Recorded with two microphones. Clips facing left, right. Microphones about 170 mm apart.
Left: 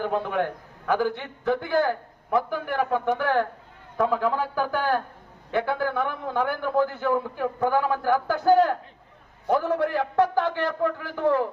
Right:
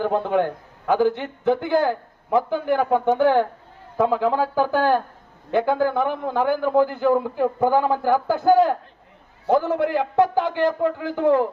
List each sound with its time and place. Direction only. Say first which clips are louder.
0.9 s a man's voice: right 5 dB; 20° right (ahead or behind)